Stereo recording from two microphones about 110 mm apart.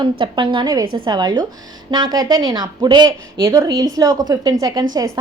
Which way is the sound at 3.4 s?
25° right (ahead or behind).